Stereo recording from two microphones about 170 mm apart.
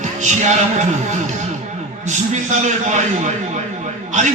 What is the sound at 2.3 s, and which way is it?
A man's voice, 45° right (ahead or behind).